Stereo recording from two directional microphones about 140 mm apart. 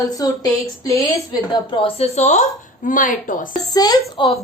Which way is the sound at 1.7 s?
45° left (ahead or behind).